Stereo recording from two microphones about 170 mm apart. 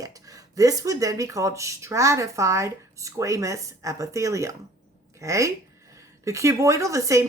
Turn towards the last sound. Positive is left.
turn(degrees=-20)  # may be behind; listen again after turning